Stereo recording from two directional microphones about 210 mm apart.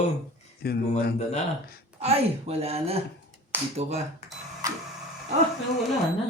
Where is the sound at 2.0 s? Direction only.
30° right (ahead or behind).